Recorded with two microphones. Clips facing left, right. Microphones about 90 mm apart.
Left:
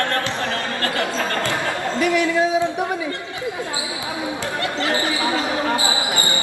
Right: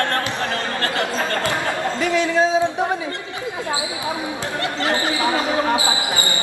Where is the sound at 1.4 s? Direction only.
20° right (ahead or behind).